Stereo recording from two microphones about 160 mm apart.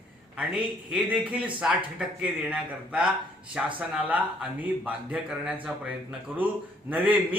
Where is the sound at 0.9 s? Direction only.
5° right (ahead or behind).